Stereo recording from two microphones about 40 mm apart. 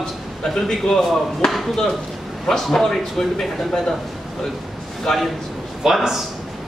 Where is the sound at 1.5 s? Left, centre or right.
Centre.